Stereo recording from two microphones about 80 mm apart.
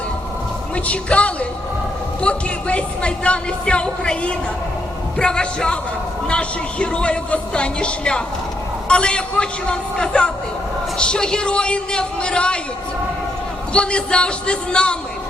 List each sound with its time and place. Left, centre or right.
0.9 s speech: centre
13.7 s speech: centre